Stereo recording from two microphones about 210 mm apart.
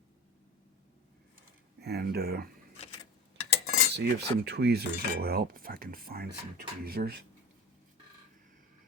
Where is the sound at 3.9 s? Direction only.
50° right (ahead or behind).